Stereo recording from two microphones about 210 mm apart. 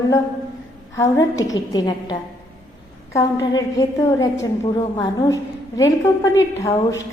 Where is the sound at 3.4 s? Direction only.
15° left (ahead or behind).